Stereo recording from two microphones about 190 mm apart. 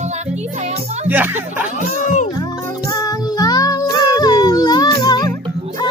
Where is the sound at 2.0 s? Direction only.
40° left (ahead or behind).